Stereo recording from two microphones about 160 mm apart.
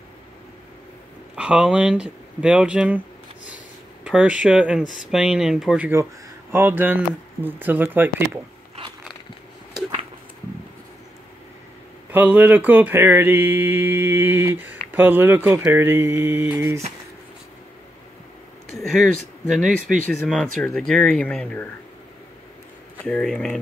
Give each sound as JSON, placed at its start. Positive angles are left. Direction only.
{"t": 1.3, "sound": "mantra", "side_deg": -5}
{"t": 4.0, "sound": "a sound", "side_deg": -5}
{"t": 4.4, "sound": "speech", "side_deg": -5}
{"t": 6.5, "sound": "mantra", "side_deg": -15}
{"t": 12.1, "sound": "mantra", "side_deg": -10}
{"t": 18.8, "sound": "speech", "side_deg": 0}
{"t": 20.2, "sound": "speech", "side_deg": 5}
{"t": 23.0, "sound": "speech", "side_deg": 5}